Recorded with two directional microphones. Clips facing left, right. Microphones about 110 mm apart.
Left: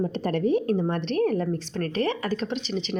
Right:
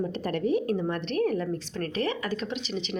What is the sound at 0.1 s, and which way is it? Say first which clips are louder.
A woman's voice: left 3 dB; 30° left (ahead or behind).